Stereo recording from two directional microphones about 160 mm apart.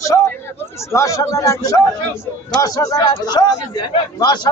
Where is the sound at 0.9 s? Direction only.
20° left (ahead or behind).